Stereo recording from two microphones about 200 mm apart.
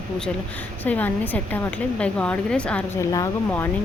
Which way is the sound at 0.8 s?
10° left (ahead or behind).